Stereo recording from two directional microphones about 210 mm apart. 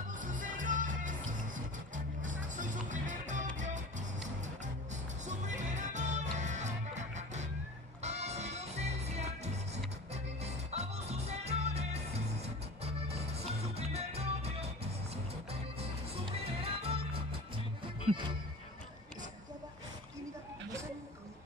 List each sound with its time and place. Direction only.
0.2 s music: 40° right (ahead or behind)
2.5 s music: 35° right (ahead or behind)
5.2 s music: 35° right (ahead or behind)
16.3 s music: 25° right (ahead or behind)